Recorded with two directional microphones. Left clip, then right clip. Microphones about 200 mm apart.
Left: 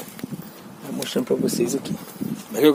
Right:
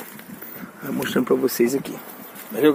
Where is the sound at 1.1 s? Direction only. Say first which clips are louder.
Right 2 dB; 20° right (ahead or behind).